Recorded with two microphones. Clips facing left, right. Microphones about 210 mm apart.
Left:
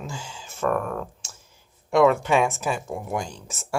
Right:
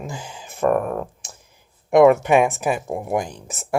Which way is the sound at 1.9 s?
15° right (ahead or behind).